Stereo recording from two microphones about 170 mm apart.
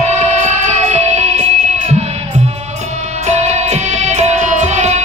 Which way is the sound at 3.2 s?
40° right (ahead or behind).